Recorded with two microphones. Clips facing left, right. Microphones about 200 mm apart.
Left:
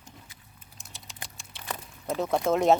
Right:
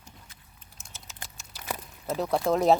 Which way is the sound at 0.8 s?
Centre (ahead or behind).